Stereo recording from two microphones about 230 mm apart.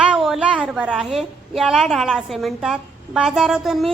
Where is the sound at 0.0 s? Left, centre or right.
Centre.